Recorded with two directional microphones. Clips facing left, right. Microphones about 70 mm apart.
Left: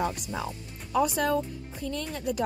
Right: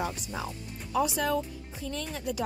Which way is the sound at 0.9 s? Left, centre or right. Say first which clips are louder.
Left 2 dB; left.